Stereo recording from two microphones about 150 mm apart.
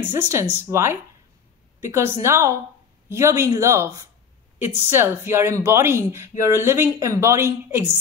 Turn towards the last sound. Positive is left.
turn(degrees=-15)  # may be behind; listen again after turning